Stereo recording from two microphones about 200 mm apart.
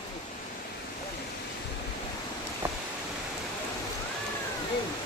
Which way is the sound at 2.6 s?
10° right (ahead or behind).